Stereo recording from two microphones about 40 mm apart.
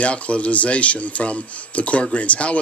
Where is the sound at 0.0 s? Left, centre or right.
Left.